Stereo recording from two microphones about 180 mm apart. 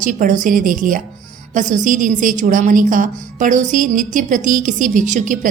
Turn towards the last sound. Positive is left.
turn(degrees=-45)  # may be behind; listen again after turning